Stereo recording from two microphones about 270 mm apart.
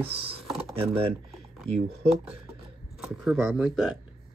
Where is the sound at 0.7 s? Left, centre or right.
Right.